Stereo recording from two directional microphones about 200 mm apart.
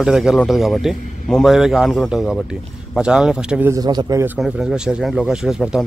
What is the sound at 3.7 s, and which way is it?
Speech, 20° right (ahead or behind).